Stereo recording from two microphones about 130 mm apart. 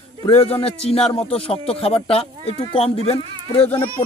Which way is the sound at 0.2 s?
50° left (ahead or behind).